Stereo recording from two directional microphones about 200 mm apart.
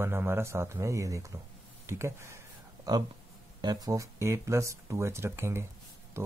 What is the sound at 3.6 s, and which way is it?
Speech, 20° right (ahead or behind).